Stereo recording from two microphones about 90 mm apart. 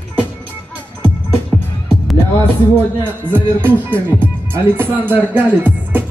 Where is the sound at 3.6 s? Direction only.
25° right (ahead or behind).